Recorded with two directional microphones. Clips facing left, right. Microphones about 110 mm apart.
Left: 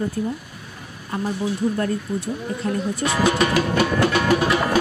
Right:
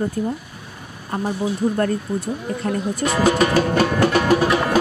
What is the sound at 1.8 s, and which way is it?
Speech, 45° right (ahead or behind).